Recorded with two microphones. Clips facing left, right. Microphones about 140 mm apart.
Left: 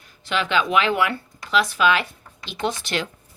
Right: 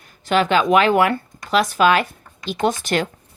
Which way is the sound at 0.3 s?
45° right (ahead or behind).